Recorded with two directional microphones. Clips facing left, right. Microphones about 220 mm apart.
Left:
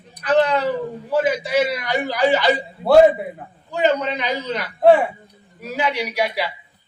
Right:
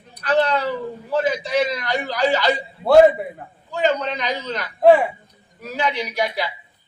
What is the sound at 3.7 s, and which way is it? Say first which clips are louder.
A man's voice: left 2 dB; 10° left (ahead or behind).